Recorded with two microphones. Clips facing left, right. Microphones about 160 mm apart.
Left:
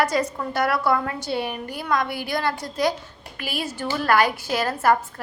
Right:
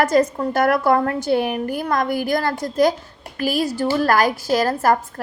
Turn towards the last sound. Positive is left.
turn(degrees=-40)  # may be behind; listen again after turning